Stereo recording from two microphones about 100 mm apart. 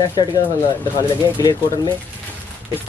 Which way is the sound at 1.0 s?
40° left (ahead or behind).